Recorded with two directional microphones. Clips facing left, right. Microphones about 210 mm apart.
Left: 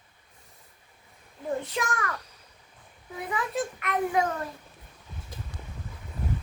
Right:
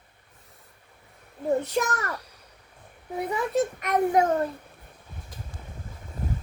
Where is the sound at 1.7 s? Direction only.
40° right (ahead or behind).